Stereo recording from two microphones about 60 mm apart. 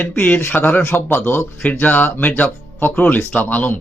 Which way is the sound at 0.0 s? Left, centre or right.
Left.